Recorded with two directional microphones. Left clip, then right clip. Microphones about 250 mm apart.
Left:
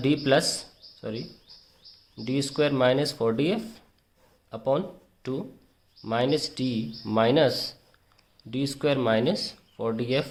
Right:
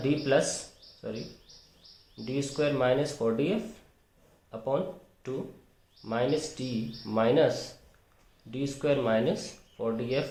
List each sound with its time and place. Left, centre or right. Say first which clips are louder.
0.0 s speech: left 3 dB; left
2.2 s speech: left 4 dB; left